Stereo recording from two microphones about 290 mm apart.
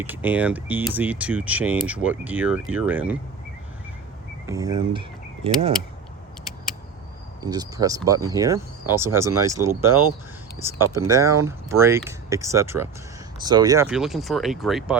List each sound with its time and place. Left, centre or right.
0.0 s speech: centre
4.4 s speech: centre
7.4 s speech: centre